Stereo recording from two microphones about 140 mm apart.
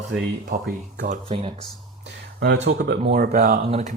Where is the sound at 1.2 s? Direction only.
40° right (ahead or behind).